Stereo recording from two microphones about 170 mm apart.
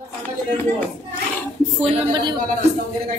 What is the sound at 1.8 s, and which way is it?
Speech, 35° right (ahead or behind).